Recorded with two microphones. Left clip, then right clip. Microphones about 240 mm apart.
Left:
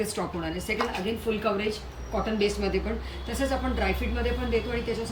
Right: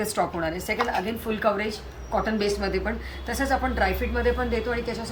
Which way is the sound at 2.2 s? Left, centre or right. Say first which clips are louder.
Right 1 dB; centre.